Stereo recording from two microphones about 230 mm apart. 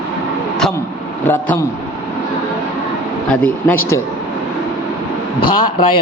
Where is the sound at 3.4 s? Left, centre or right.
Centre.